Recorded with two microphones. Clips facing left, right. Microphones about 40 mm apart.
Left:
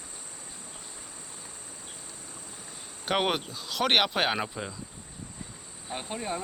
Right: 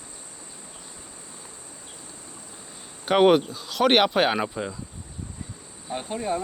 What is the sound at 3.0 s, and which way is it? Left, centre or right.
Speech, centre.